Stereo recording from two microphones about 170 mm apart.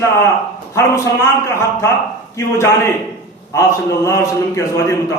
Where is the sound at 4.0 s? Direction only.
15° left (ahead or behind).